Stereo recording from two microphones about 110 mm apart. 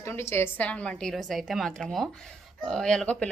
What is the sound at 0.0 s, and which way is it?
A woman's voice, 25° left (ahead or behind).